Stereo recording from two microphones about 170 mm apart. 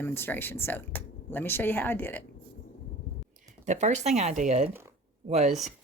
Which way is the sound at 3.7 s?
40° right (ahead or behind).